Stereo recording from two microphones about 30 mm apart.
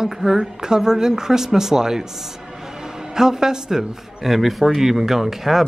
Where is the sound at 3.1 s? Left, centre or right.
Centre.